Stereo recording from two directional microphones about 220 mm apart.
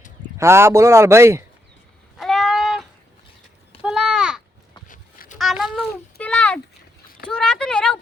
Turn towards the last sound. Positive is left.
turn(degrees=5)  # may be behind; listen again after turning